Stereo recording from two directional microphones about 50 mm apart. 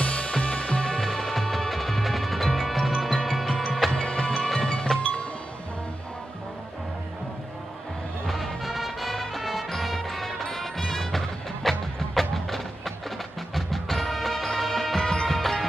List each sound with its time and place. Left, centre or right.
0.0 s music: left
0.9 s music: centre
3.9 s music: centre
8.3 s music: centre